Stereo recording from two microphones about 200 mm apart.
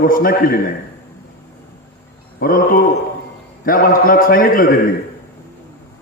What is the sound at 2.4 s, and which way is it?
A man's voice, 45° left (ahead or behind).